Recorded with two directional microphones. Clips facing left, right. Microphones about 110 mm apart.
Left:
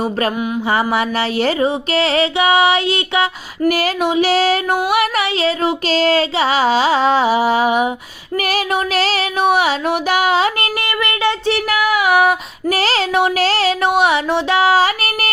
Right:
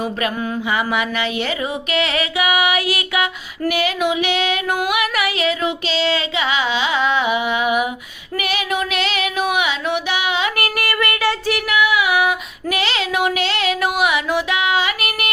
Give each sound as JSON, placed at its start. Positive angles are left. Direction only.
{"t": 0.7, "sound": "child singing", "side_deg": 35}
{"t": 3.7, "sound": "child singing", "side_deg": 40}
{"t": 10.6, "sound": "a sound", "side_deg": 20}
{"t": 11.8, "sound": "child singing", "side_deg": 40}